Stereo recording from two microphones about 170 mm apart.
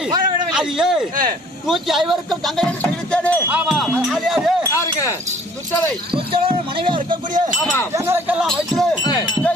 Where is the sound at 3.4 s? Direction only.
5° right (ahead or behind).